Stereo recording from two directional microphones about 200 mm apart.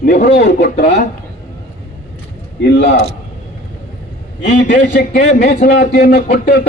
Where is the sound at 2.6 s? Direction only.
60° left (ahead or behind).